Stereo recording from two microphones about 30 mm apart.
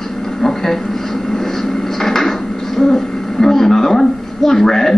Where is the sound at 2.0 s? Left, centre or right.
Centre.